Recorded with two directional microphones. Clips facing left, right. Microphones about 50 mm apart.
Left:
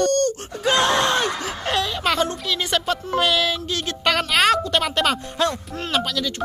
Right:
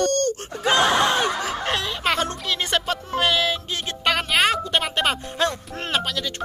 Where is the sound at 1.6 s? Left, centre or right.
Right.